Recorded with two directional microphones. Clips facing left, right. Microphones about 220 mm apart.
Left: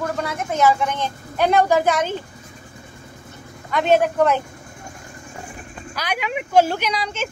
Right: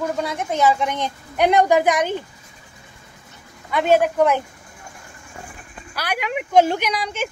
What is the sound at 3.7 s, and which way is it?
Speech, 10° right (ahead or behind).